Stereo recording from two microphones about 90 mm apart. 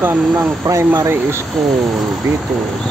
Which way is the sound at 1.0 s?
30° right (ahead or behind).